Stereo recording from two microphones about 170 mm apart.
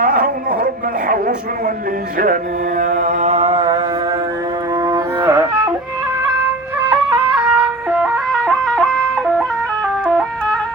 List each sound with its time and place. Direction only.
0.0 s a sound: 55° right (ahead or behind)
2.1 s mantra: 55° right (ahead or behind); by 3.8 s 35° right (ahead or behind)
4.7 s music: 20° right (ahead or behind)
6.7 s music: 10° right (ahead or behind)